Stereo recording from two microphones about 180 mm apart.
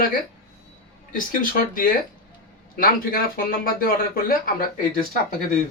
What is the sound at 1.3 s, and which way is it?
Speech, 50° left (ahead or behind).